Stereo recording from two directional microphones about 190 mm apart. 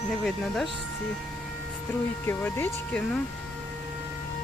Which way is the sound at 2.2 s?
10° left (ahead or behind).